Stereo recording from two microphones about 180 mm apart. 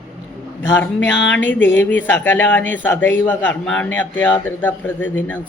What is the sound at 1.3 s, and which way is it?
A man's voice, 10° left (ahead or behind).